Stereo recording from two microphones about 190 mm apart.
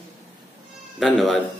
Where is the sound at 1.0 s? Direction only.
Centre (ahead or behind).